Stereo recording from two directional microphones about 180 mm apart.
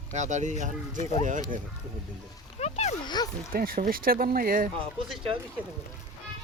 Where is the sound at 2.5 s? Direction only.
35° left (ahead or behind).